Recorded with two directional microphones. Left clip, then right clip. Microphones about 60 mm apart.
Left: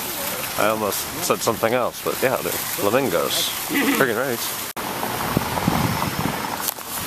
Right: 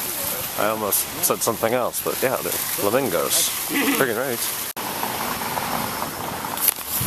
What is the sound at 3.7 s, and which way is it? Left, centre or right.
Speech, right.